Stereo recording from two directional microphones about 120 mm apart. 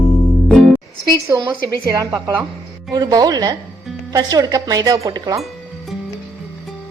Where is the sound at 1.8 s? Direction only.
25° right (ahead or behind).